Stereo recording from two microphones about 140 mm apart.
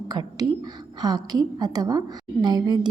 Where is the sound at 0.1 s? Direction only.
30° right (ahead or behind).